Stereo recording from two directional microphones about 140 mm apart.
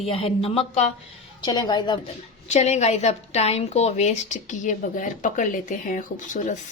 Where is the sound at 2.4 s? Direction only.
50° left (ahead or behind).